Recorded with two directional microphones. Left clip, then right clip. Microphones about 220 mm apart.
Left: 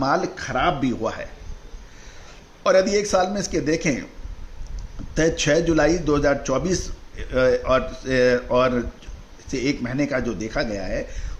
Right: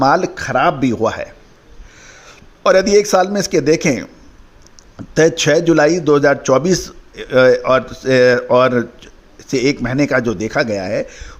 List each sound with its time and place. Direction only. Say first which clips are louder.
0.0 s a man's voice: right 8 dB; 35° right (ahead or behind)
5.1 s a man's voice: right 7 dB; 40° right (ahead or behind)